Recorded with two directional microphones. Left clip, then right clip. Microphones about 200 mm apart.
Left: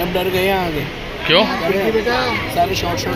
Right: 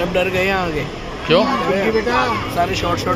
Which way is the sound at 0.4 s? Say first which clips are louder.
Left 1 dB; 40° left (ahead or behind).